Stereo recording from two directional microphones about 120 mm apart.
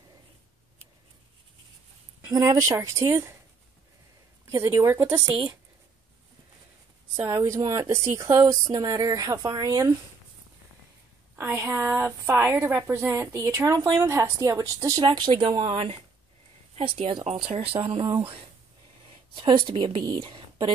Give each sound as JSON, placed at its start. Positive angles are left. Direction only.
{"t": 2.3, "sound": "a woman's voice", "side_deg": -30}
{"t": 4.5, "sound": "a woman's voice", "side_deg": -20}
{"t": 7.2, "sound": "a woman's voice", "side_deg": -25}
{"t": 11.3, "sound": "a woman's voice", "side_deg": -20}
{"t": 15.0, "sound": "a woman's voice", "side_deg": -40}
{"t": 19.7, "sound": "a woman's voice", "side_deg": -40}